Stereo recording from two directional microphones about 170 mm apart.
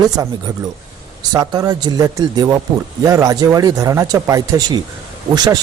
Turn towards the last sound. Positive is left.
turn(degrees=-25)  # may be behind; listen again after turning